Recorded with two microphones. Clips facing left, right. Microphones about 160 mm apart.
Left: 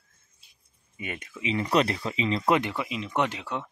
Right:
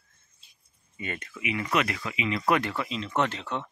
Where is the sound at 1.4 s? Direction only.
30° left (ahead or behind).